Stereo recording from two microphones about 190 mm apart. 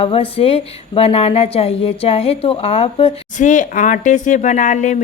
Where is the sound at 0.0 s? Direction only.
30° left (ahead or behind).